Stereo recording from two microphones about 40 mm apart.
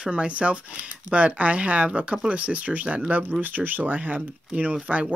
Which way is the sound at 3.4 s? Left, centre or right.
Right.